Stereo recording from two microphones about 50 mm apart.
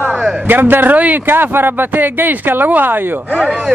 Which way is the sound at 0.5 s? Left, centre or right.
Right.